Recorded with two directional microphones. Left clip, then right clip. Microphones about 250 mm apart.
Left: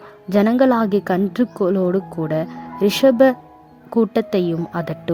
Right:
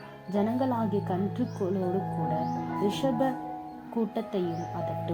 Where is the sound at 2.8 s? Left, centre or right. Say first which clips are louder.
Left 16 dB; left.